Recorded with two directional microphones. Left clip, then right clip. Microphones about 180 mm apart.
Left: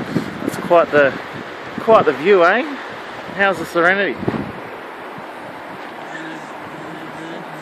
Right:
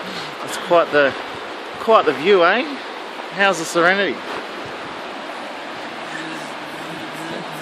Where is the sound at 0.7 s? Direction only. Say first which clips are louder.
Left 2 dB; 20° left (ahead or behind).